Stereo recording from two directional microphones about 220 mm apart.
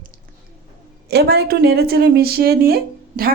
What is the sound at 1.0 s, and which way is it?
A woman's voice, 45° right (ahead or behind).